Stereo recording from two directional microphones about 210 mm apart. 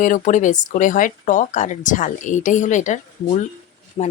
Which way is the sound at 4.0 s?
30° left (ahead or behind).